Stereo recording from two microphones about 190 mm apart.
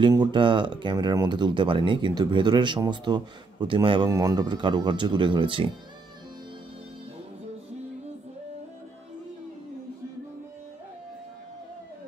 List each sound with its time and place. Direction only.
0.0 s speech: 25° right (ahead or behind)